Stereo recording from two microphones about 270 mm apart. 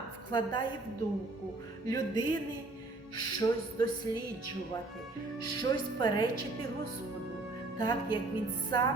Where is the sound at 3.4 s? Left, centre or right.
Centre.